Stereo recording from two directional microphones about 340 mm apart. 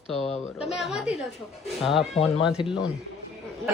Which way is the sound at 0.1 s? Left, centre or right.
Centre.